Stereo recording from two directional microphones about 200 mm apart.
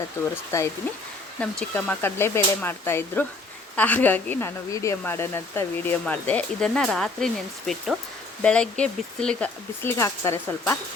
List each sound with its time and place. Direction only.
1.4 s speech: 5° left (ahead or behind)
8.4 s speech: 5° left (ahead or behind)